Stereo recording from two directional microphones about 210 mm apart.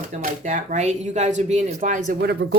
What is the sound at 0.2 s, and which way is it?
Speech, 35° right (ahead or behind).